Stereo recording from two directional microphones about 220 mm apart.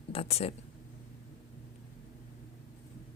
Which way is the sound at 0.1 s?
25° left (ahead or behind).